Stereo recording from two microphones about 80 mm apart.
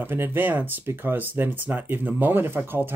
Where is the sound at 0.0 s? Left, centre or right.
Right.